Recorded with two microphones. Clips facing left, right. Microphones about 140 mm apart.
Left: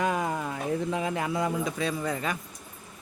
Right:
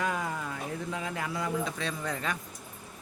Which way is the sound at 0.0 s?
25° left (ahead or behind).